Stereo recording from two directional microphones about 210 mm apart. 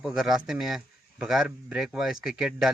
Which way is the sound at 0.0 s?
5° right (ahead or behind).